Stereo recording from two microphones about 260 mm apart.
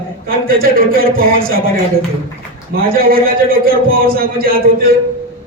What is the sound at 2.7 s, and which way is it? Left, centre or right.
A man's voice, right.